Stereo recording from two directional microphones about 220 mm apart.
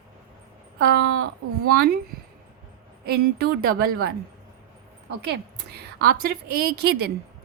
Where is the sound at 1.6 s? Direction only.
45° right (ahead or behind).